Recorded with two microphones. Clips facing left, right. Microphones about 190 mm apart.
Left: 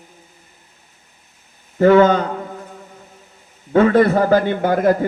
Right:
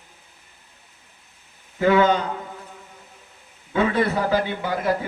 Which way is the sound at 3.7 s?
50° left (ahead or behind).